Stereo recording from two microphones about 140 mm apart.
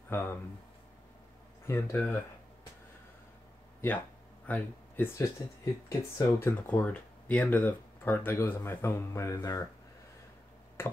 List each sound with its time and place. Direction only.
0.1 s speech: 15° left (ahead or behind)
1.7 s speech: 15° left (ahead or behind)
4.5 s speech: 15° left (ahead or behind)
6.7 s speech: 10° left (ahead or behind)
10.8 s finger snapping: 15° left (ahead or behind)